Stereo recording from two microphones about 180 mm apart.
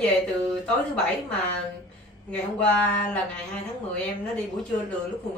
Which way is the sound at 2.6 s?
10° left (ahead or behind).